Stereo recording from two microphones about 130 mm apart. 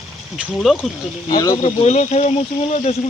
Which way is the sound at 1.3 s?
30° left (ahead or behind).